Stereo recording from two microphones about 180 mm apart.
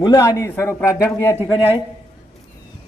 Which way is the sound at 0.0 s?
20° left (ahead or behind).